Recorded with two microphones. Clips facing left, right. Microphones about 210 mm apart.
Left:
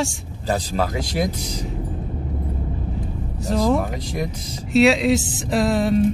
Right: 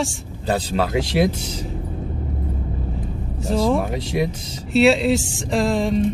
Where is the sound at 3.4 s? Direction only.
Centre (ahead or behind).